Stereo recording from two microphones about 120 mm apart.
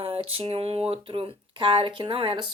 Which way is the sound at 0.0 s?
50° right (ahead or behind).